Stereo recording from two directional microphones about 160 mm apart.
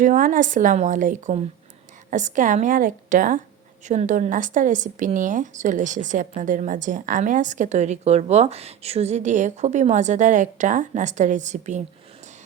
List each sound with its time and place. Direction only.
0.0 s a woman's voice: 55° right (ahead or behind)